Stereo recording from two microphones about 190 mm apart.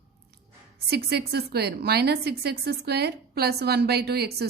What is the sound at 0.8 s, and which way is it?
A woman's voice, 60° right (ahead or behind).